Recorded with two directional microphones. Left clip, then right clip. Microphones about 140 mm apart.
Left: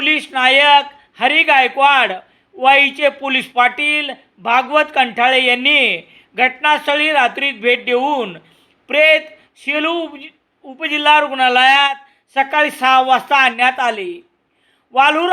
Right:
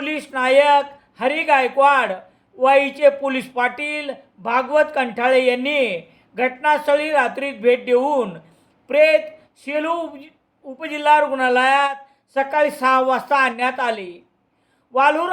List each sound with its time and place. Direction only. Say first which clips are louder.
0.0 s a man's voice: left 8 dB; 20° left (ahead or behind)
9.6 s a man's voice: left 4 dB; 20° left (ahead or behind)